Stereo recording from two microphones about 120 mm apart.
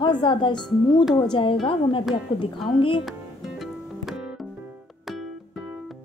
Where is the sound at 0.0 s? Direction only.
40° left (ahead or behind).